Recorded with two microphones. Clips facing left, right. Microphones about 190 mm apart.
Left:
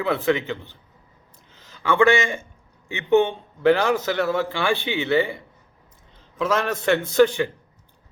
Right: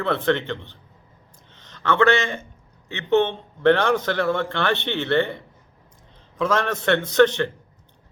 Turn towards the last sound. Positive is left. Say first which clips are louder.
# even
turn(degrees=10)  # may be behind; listen again after turning